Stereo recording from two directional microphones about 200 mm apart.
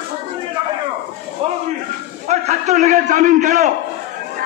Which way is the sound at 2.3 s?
35° right (ahead or behind).